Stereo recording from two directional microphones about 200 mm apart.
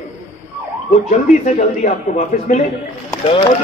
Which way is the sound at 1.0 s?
35° left (ahead or behind).